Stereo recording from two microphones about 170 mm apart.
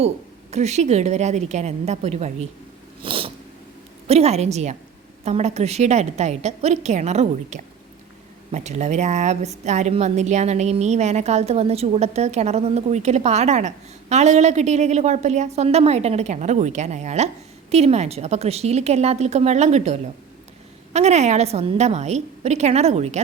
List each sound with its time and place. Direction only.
0.5 s a woman's voice: 40° right (ahead or behind)
3.0 s cat: 30° right (ahead or behind)
4.0 s a woman's voice: 40° right (ahead or behind)